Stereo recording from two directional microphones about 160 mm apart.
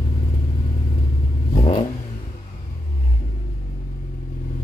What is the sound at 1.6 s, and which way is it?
Vehicle, 35° left (ahead or behind).